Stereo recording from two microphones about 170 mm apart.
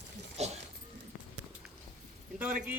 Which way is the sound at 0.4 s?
40° right (ahead or behind).